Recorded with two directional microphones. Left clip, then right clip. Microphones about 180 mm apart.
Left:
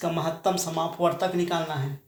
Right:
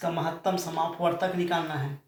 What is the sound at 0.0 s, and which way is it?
Speech, 50° left (ahead or behind).